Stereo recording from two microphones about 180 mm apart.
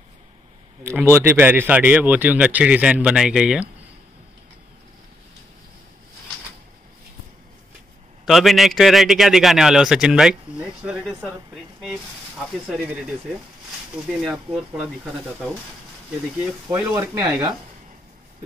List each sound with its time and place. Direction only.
0.8 s a man's voice: 15° right (ahead or behind)
8.3 s a man's voice: centre (ahead or behind)
12.6 s a man's voice: 5° right (ahead or behind)
14.0 s a man's voice: centre (ahead or behind)
16.6 s a man's voice: 10° right (ahead or behind)